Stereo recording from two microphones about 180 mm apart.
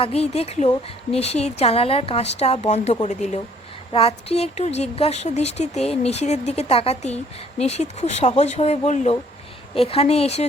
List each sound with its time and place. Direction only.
0.0 s a woman's voice: 35° left (ahead or behind)